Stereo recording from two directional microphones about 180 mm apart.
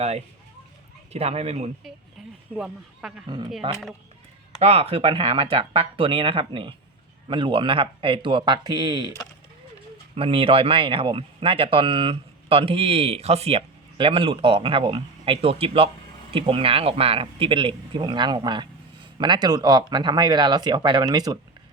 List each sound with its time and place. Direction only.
1.1 s speech: 35° right (ahead or behind)
2.6 s speech: 5° right (ahead or behind)
4.6 s speech: 35° right (ahead or behind)
10.2 s speech: 30° right (ahead or behind)